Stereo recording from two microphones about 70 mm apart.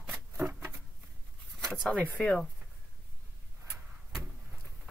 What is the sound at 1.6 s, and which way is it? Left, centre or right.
Speech, centre.